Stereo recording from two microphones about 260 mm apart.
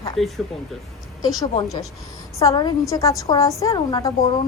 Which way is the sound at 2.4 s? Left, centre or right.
Centre.